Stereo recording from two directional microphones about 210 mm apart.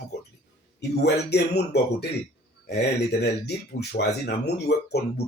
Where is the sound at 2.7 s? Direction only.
50° left (ahead or behind).